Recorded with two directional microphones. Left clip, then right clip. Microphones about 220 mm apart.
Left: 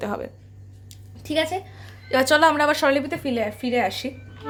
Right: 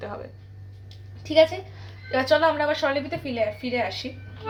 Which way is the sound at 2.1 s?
55° left (ahead or behind).